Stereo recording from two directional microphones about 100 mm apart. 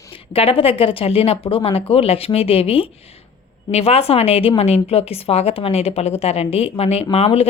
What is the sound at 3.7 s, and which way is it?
A woman's voice, 90° left.